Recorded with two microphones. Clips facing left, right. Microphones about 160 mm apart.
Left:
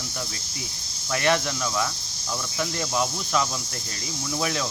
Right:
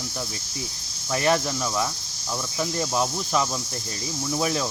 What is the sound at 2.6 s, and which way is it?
Speech, 25° right (ahead or behind).